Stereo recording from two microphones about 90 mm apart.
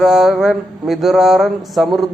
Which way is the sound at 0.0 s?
5° right (ahead or behind).